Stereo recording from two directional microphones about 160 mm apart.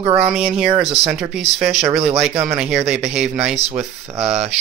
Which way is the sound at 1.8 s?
40° right (ahead or behind).